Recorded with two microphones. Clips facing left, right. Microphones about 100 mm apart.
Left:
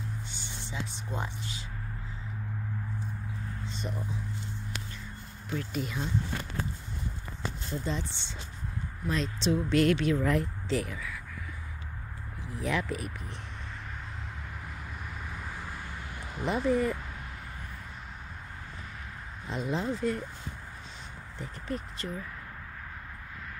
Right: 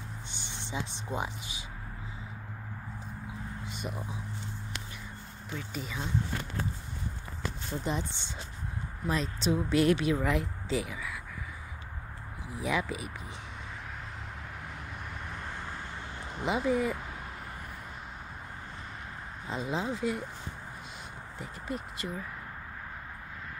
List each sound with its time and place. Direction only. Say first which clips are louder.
0.3 s speech: right 2 dB; 20° right (ahead or behind)
3.6 s speech: left 2 dB; 10° right (ahead or behind)
5.6 s speech: left 4 dB; centre (ahead or behind)
7.7 s speech: right 1 dB; 15° right (ahead or behind)
9.1 s speech: left 1 dB; 5° right (ahead or behind)
12.4 s speech: even; 10° right (ahead or behind)
15.2 s vehicle: right 1 dB; 5° left (ahead or behind)
16.3 s speech: left 1 dB; 5° right (ahead or behind)
19.4 s speech: left 1 dB; centre (ahead or behind)
21.4 s speech: left 1 dB; 5° right (ahead or behind)